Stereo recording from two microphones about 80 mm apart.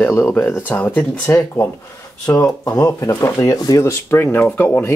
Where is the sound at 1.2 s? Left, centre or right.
Left.